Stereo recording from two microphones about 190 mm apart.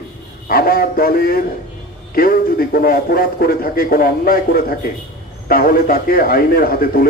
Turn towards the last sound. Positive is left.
turn(degrees=50)  # may be behind; listen again after turning